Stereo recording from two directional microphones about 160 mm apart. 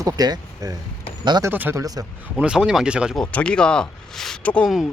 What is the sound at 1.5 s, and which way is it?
Speech, 10° right (ahead or behind).